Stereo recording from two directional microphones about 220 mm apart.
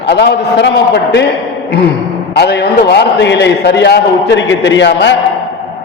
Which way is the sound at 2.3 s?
50° left (ahead or behind).